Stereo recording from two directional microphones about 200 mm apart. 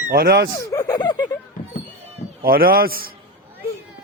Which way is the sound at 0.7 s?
15° left (ahead or behind).